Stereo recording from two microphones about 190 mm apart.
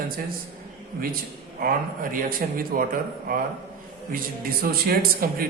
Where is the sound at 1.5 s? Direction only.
50° right (ahead or behind).